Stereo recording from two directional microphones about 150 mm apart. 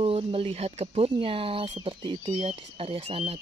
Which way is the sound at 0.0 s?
40° right (ahead or behind).